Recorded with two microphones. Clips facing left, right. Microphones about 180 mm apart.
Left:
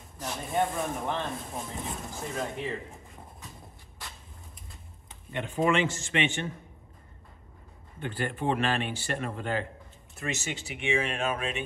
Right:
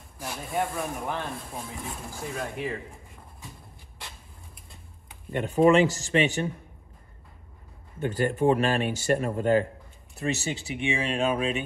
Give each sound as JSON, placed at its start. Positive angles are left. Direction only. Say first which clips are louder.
{"t": 0.2, "sound": "speech", "louder": "left 1 dB", "side_deg": 0}
{"t": 5.3, "sound": "speech", "louder": "right 7 dB", "side_deg": -45}
{"t": 8.0, "sound": "speech", "louder": "right 8 dB", "side_deg": -40}